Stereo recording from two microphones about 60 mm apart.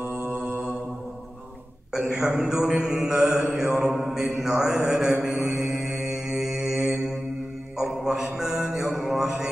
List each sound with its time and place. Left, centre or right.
0.0 s mantra: right
2.0 s mantra: centre
6.8 s mantra: right
7.7 s mantra: centre